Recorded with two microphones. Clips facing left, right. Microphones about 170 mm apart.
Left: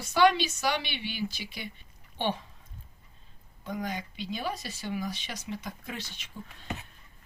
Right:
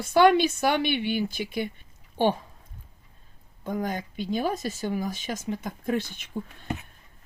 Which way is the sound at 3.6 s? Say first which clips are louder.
Right 5 dB; 50° right (ahead or behind).